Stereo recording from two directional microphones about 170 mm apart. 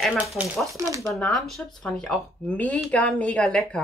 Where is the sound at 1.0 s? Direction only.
5° left (ahead or behind).